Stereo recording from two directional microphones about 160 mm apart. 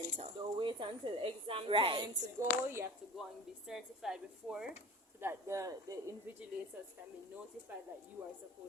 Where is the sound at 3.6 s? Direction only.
5° right (ahead or behind).